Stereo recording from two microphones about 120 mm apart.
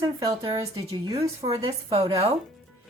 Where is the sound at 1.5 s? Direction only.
45° right (ahead or behind).